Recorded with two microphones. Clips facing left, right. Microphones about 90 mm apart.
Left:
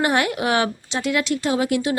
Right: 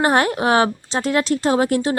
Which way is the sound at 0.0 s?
35° right (ahead or behind).